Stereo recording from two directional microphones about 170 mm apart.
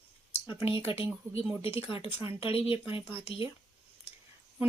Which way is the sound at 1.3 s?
35° left (ahead or behind).